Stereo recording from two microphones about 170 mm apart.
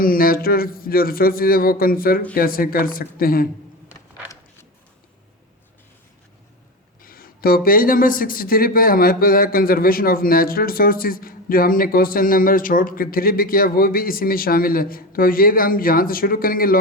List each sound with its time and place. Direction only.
0.0 s speech: 60° left (ahead or behind)
7.0 s speech: 60° left (ahead or behind)